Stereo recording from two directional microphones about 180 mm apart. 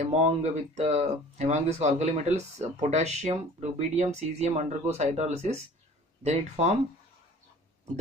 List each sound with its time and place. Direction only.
0.0 s speech: 35° right (ahead or behind)